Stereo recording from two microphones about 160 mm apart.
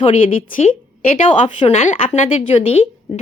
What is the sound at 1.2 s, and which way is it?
A woman's voice, 50° left (ahead or behind).